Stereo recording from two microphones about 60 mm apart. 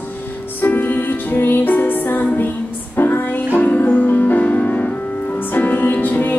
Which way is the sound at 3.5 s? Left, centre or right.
Left.